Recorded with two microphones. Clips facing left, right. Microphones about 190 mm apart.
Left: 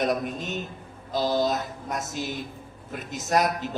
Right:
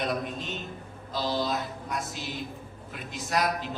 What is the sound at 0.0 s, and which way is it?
A man's voice, 45° left (ahead or behind).